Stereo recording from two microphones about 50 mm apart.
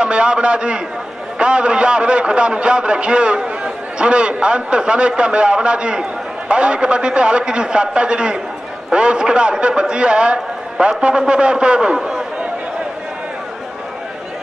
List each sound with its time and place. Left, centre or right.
0.0 s a man's voice: centre